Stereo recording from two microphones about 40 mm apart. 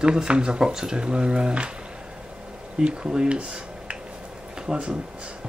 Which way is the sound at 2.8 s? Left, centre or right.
Right.